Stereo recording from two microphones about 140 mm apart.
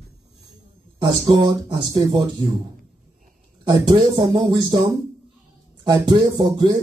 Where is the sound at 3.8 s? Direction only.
35° right (ahead or behind).